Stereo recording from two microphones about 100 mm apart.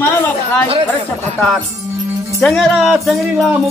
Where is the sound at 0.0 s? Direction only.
25° left (ahead or behind).